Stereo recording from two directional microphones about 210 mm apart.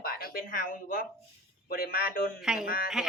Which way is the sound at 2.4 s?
5° right (ahead or behind).